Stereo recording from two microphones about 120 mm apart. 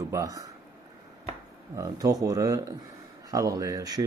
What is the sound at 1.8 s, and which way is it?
Speech, 30° right (ahead or behind).